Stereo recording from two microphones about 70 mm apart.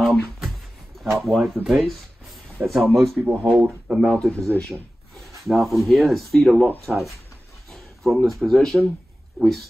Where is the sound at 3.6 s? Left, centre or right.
Centre.